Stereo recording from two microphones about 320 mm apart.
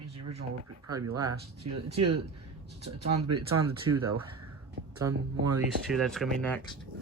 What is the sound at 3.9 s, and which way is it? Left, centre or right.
Speech, right.